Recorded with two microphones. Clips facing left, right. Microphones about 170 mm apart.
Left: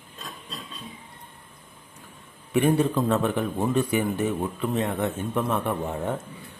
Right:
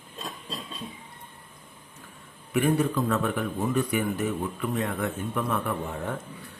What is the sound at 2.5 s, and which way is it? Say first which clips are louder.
A man's voice: left 3 dB; 25° left (ahead or behind).